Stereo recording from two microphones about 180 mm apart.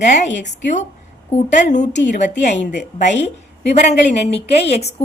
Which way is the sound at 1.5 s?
40° left (ahead or behind).